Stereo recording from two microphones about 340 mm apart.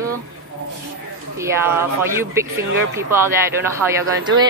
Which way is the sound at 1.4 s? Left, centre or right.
Centre.